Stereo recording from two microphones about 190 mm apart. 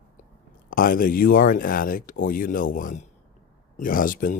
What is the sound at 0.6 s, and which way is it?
Speech, 45° left (ahead or behind).